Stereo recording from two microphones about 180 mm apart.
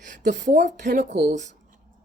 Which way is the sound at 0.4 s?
45° right (ahead or behind).